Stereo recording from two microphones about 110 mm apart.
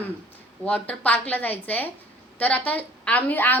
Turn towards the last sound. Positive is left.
turn(degrees=15)  # may be behind; listen again after turning